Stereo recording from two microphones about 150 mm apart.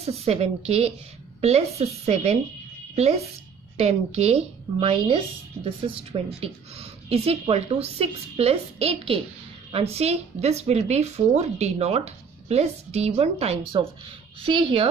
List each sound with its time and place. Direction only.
0.0 s a woman's voice: 45° right (ahead or behind)
3.7 s a woman's voice: 45° right (ahead or behind)